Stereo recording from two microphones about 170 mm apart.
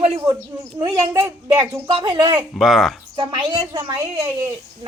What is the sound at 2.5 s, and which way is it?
Speech, centre (ahead or behind).